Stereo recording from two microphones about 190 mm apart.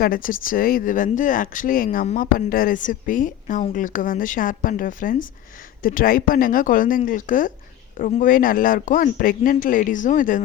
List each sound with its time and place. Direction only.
0.0 s speech: 50° left (ahead or behind)